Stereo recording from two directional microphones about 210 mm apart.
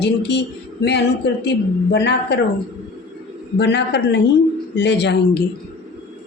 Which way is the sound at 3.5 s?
55° left (ahead or behind).